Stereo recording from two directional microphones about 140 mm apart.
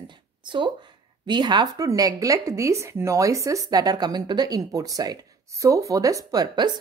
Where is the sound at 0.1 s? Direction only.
35° right (ahead or behind).